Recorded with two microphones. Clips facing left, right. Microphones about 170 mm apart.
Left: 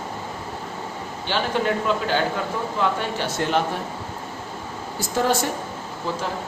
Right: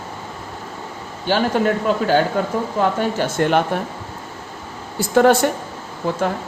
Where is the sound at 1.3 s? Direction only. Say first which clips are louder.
Right 5 dB; 45° right (ahead or behind).